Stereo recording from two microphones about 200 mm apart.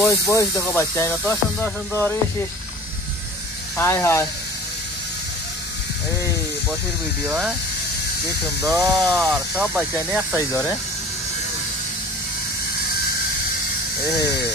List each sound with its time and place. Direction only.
0.0 s speech: 15° left (ahead or behind)
3.7 s speech: 15° left (ahead or behind)
7.2 s speech: 5° right (ahead or behind)
8.6 s speech: 15° right (ahead or behind)
9.0 s speech: centre (ahead or behind)
10.3 s speech: 15° left (ahead or behind)